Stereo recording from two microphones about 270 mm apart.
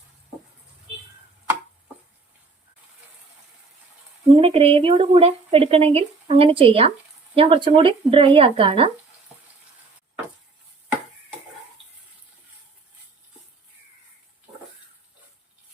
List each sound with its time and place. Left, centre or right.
4.4 s speech: right